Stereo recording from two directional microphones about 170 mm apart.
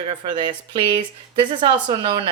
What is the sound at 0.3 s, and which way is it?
Speech, 25° right (ahead or behind).